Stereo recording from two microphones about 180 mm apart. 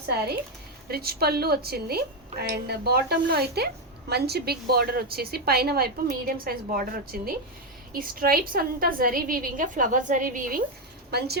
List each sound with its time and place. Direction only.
0.1 s a woman's voice: 60° right (ahead or behind)
11.1 s a woman's voice: 60° right (ahead or behind)